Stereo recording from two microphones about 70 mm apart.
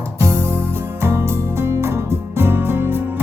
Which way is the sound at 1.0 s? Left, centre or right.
Right.